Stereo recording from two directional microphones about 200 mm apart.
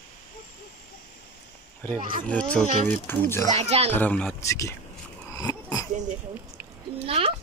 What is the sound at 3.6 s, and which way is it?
Speech, 30° right (ahead or behind).